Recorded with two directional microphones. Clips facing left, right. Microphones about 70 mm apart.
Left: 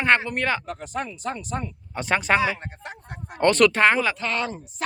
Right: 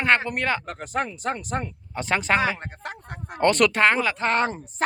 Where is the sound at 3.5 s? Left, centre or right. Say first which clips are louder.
Left 2 dB; centre.